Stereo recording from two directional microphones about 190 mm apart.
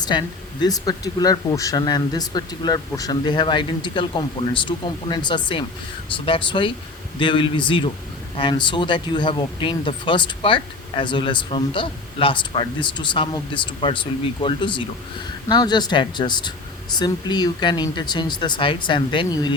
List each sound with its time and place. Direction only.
0.0 s speech: 20° left (ahead or behind)